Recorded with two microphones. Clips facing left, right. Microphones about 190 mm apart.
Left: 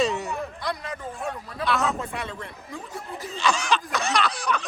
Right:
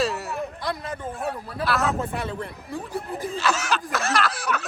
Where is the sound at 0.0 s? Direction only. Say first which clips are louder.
Left 1 dB; centre (ahead or behind).